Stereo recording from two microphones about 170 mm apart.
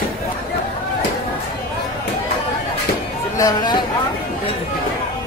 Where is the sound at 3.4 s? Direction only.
25° left (ahead or behind).